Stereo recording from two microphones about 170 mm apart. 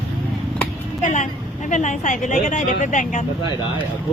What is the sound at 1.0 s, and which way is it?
A woman's voice, 45° left (ahead or behind).